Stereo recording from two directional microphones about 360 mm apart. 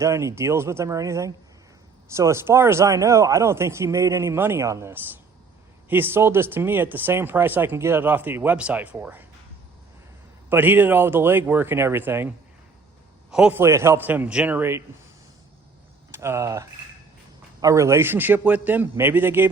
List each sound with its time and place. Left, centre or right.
0.0 s speech: centre
10.5 s speech: centre
13.3 s speech: centre
16.1 s speech: centre